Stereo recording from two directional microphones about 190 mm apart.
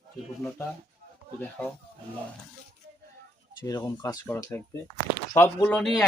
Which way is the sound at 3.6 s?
20° left (ahead or behind).